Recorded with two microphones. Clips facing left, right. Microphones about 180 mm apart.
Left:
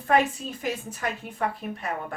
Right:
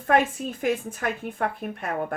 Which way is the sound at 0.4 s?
55° right (ahead or behind).